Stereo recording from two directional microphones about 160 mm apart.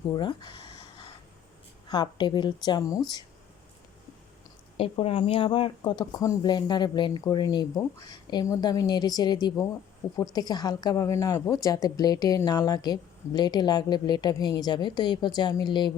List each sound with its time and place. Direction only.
0.1 s a sound: 25° left (ahead or behind)
1.9 s speech: 30° left (ahead or behind)
4.8 s speech: 35° left (ahead or behind)